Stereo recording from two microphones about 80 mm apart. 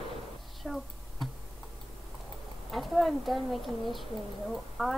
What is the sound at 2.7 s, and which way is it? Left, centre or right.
Speech, centre.